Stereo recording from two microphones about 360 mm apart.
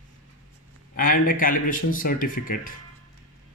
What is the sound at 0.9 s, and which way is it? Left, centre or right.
A man's voice, left.